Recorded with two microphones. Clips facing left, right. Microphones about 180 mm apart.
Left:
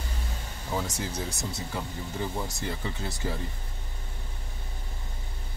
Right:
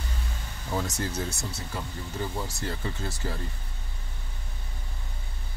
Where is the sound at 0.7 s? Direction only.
10° left (ahead or behind).